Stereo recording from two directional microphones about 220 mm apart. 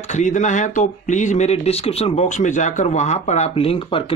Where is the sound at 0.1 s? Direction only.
35° left (ahead or behind).